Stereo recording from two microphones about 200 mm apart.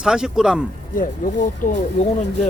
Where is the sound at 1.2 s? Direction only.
45° left (ahead or behind).